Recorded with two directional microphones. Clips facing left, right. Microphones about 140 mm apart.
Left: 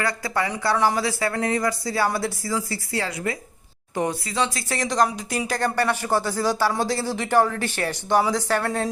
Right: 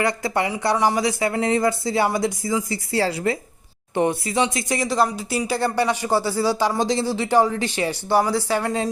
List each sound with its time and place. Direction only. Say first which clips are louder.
0.0 s speech: right 3 dB; 20° right (ahead or behind)
2.9 s a woman's voice: right 6 dB; 30° right (ahead or behind)
4.8 s speech: even; 5° right (ahead or behind)